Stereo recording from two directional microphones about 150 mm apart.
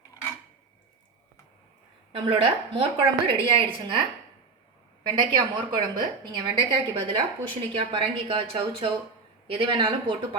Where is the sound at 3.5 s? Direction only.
35° right (ahead or behind).